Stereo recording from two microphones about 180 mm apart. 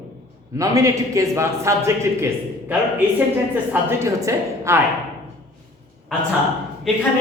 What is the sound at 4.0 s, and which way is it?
Speech, 15° right (ahead or behind).